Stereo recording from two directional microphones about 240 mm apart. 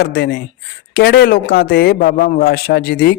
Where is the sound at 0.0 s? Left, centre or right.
Left.